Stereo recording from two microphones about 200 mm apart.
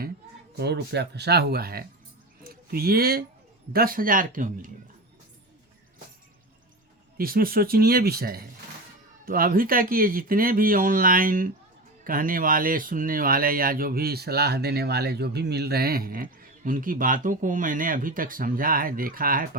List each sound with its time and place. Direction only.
0.5 s speech: 55° right (ahead or behind)
7.2 s speech: 45° right (ahead or behind)